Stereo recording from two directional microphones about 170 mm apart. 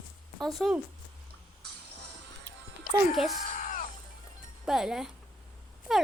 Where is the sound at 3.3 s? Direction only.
50° left (ahead or behind).